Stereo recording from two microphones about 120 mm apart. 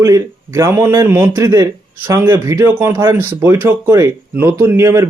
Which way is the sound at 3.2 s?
20° right (ahead or behind).